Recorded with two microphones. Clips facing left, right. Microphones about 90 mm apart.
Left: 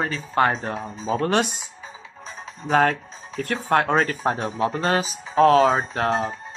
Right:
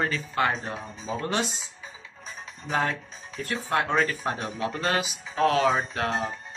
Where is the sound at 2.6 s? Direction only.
50° left (ahead or behind).